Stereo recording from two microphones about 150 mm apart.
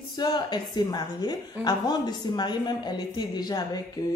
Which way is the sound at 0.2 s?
30° left (ahead or behind).